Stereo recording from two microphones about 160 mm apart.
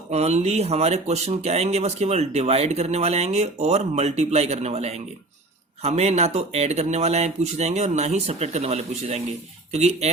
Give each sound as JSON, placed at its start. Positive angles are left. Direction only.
{"t": 0.1, "sound": "speech", "side_deg": -45}